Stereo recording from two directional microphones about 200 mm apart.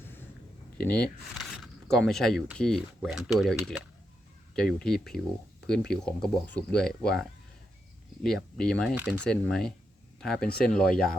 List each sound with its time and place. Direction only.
0.9 s speech: 5° left (ahead or behind)
8.2 s speech: centre (ahead or behind)
9.0 s speech: 10° right (ahead or behind)
9.2 s speech: 5° left (ahead or behind)